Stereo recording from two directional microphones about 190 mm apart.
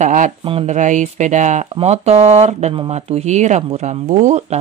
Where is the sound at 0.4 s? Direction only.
30° right (ahead or behind).